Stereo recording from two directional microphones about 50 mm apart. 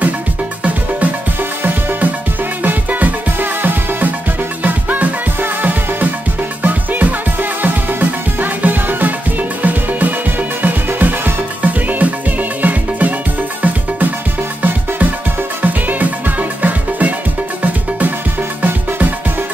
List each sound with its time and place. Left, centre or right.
1.6 s music: right
15.6 s music: right
18.6 s music: right